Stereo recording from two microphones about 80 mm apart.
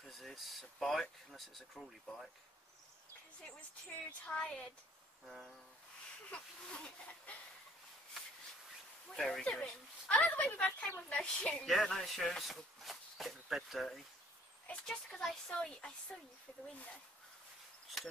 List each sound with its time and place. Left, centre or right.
0.0 s speech: centre
4.3 s a woman's voice: centre
5.2 s speech: centre
6.3 s a woman's voice: centre
9.1 s a woman's voice: centre
17.8 s insect: centre